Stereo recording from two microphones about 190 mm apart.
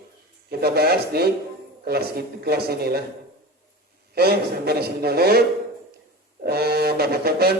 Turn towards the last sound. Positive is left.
turn(degrees=-55)  # may be behind; listen again after turning